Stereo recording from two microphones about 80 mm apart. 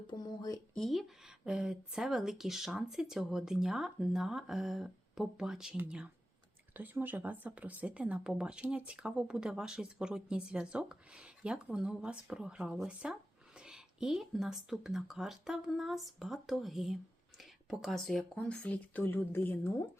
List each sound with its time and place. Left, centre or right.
0.1 s speech: left
0.7 s a woman's voice: centre
18.3 s speech: centre